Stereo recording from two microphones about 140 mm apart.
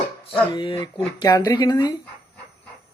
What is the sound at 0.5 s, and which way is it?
Speech, 40° left (ahead or behind).